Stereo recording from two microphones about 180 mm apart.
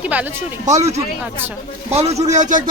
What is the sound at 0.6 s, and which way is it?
Speech, 40° right (ahead or behind).